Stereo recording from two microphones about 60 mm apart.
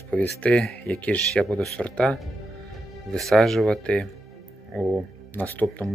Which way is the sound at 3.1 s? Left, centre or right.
Centre.